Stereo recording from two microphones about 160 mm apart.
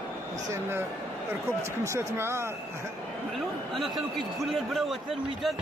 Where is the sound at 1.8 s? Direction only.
15° right (ahead or behind).